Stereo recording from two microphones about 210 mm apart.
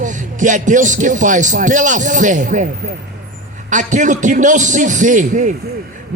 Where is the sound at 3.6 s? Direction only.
35° right (ahead or behind).